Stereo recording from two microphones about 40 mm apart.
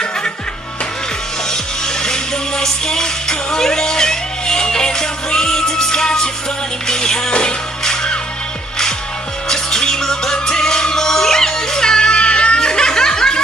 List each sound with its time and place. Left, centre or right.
2.0 s music: centre
9.5 s music: centre